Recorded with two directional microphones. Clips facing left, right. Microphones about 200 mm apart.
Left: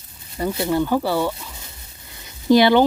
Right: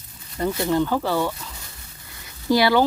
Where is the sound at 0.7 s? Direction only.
10° left (ahead or behind).